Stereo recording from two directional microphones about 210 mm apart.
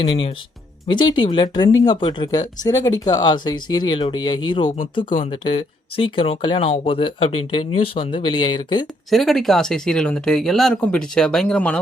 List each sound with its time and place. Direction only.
0.0 s speech: 25° left (ahead or behind)
9.0 s speech: centre (ahead or behind)